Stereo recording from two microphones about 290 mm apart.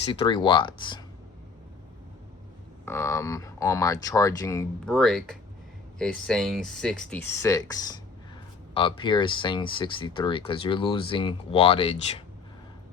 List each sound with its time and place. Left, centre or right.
0.0 s speech: centre
2.8 s speech: centre